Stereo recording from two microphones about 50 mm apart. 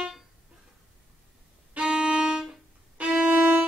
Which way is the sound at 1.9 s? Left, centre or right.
Centre.